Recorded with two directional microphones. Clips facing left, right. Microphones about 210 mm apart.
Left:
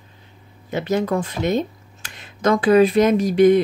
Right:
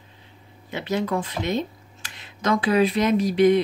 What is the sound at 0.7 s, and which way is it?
Speech, 45° left (ahead or behind).